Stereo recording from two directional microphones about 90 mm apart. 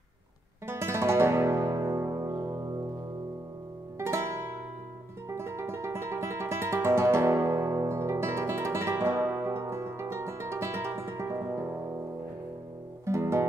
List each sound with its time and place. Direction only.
0.7 s music: 30° right (ahead or behind)
4.0 s music: 30° right (ahead or behind)
13.0 s music: 30° right (ahead or behind)